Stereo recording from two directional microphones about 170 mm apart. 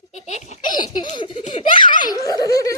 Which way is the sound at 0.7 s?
25° left (ahead or behind).